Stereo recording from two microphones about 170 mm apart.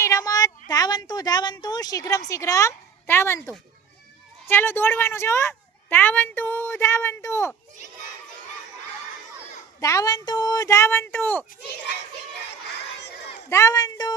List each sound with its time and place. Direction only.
0.0 s a woman's voice: 20° left (ahead or behind)
9.8 s speech: 20° left (ahead or behind)
13.5 s speech: 20° left (ahead or behind)